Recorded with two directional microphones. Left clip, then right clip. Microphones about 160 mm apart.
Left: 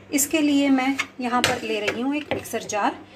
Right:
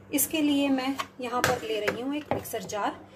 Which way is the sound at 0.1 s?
15° left (ahead or behind).